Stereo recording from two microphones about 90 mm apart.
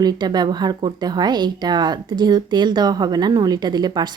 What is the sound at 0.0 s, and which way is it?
A woman's voice, 50° right (ahead or behind).